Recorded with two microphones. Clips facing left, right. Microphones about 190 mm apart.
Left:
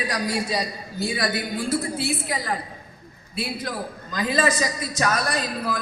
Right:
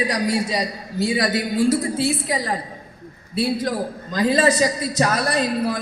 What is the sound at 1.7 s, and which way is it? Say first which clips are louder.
A man's voice: right 4 dB; 40° right (ahead or behind).